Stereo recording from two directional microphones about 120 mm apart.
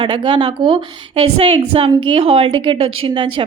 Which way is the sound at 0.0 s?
45° right (ahead or behind).